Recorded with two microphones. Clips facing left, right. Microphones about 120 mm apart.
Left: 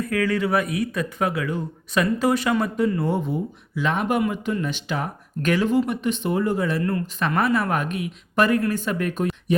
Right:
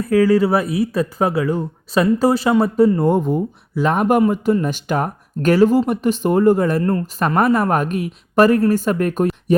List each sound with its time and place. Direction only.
0.0 s speech: 35° right (ahead or behind)
3.1 s speech: 45° right (ahead or behind)